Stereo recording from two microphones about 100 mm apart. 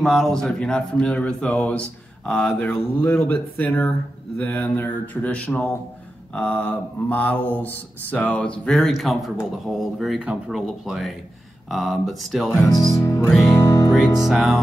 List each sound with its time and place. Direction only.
0.0 s speech: 5° left (ahead or behind)
12.6 s speech: 30° left (ahead or behind)
13.5 s music: 30° left (ahead or behind)
14.2 s speech: 5° right (ahead or behind)